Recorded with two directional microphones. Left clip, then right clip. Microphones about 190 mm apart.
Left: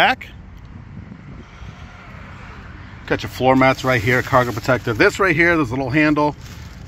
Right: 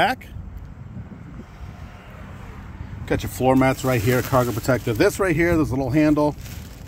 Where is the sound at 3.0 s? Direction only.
10° right (ahead or behind).